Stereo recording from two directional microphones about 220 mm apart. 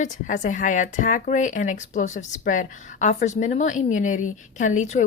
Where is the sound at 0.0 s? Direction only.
35° left (ahead or behind).